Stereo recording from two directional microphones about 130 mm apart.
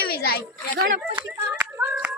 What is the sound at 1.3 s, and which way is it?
Hands, 20° right (ahead or behind).